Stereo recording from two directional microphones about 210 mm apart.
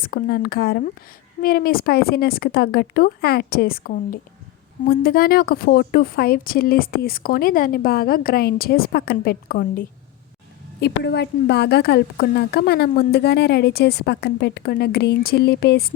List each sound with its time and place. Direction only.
0.0 s a woman's voice: 45° left (ahead or behind)